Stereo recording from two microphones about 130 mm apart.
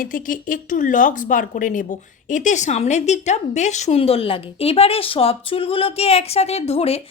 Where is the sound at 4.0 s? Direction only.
45° left (ahead or behind).